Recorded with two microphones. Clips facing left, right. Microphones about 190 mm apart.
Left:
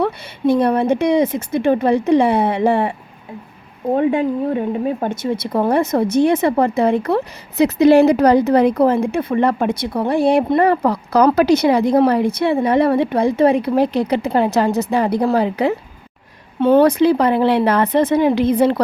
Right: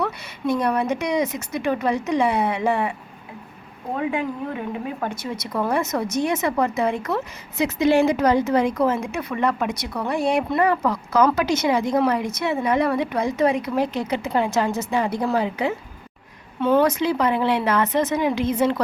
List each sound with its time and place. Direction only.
0.0 s a woman's voice: 30° left (ahead or behind)
3.9 s speech: 30° left (ahead or behind)